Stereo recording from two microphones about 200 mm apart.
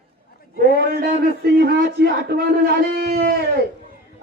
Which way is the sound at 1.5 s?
55° right (ahead or behind).